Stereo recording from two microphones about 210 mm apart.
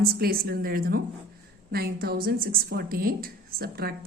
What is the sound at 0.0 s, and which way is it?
A woman's voice, 45° right (ahead or behind).